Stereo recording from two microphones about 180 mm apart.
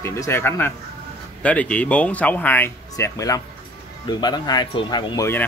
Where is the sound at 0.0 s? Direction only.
15° left (ahead or behind).